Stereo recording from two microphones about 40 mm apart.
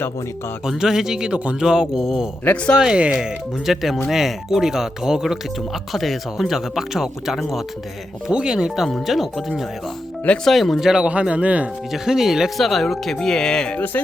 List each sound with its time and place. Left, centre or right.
0.6 s speech: centre
1.3 s speech: right
1.6 s speech: centre
3.7 s speech: centre
5.9 s speech: centre
8.3 s speech: centre
10.4 s speech: centre
10.8 s speech: centre
11.0 s speech: right
11.9 s speech: centre
12.5 s speech: centre
13.7 s music: left